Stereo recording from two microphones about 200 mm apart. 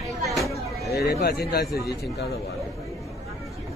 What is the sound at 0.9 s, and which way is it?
Speech, 50° left (ahead or behind).